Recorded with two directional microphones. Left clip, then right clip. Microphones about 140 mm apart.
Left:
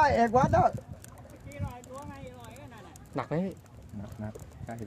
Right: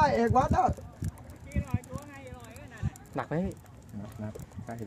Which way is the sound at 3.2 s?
5° left (ahead or behind).